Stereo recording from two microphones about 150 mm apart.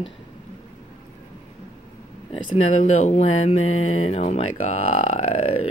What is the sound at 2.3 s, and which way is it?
Speech, 40° left (ahead or behind).